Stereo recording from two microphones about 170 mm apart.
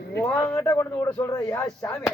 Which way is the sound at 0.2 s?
10° left (ahead or behind).